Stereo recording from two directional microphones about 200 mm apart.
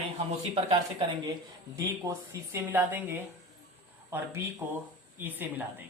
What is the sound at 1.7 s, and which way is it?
Speech, 15° right (ahead or behind).